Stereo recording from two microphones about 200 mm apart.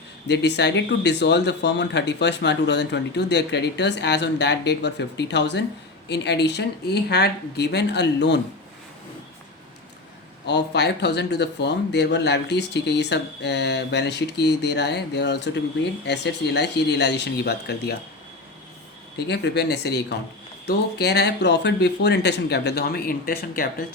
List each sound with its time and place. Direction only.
0.3 s speech: 60° left (ahead or behind)
10.4 s speech: 55° left (ahead or behind)
19.1 s speech: 55° left (ahead or behind)